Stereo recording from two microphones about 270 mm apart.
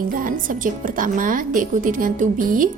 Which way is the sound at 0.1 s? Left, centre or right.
Right.